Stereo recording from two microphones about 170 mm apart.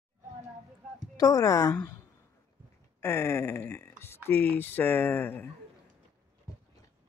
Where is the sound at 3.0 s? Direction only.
15° left (ahead or behind).